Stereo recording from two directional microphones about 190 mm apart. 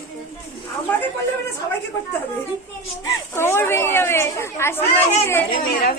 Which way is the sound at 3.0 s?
15° left (ahead or behind).